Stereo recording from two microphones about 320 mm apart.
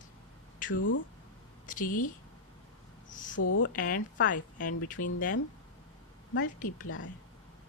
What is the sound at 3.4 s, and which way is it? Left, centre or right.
A woman's voice, left.